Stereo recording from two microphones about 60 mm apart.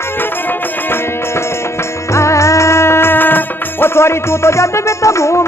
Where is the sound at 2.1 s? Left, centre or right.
Left.